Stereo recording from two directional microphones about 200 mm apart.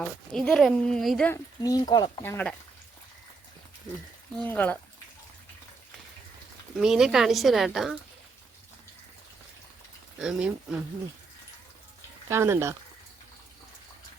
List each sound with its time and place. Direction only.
0.0 s speech: 5° left (ahead or behind)
1.6 s speech: 20° left (ahead or behind)
4.4 s speech: 10° left (ahead or behind)
6.7 s speech: centre (ahead or behind)
10.2 s speech: 5° right (ahead or behind)
12.3 s speech: 10° right (ahead or behind)